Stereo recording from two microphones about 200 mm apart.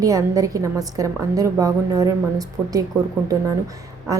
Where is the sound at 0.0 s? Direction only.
15° right (ahead or behind).